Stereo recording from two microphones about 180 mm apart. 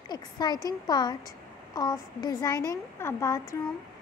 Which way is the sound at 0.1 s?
20° left (ahead or behind).